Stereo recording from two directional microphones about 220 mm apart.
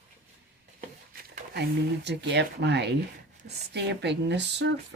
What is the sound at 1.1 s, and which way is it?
Speech, 45° right (ahead or behind).